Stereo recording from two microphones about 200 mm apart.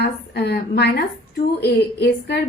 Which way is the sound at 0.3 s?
55° left (ahead or behind).